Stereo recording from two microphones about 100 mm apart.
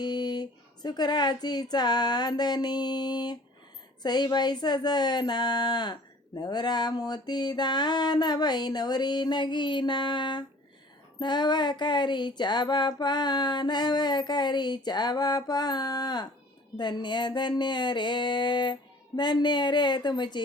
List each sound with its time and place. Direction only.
0.0 s speech: 45° left (ahead or behind)